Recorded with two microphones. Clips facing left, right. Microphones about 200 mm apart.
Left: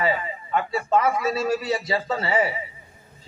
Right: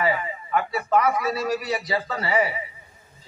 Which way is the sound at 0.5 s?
25° left (ahead or behind).